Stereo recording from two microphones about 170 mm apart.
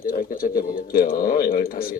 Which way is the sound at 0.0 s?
55° left (ahead or behind).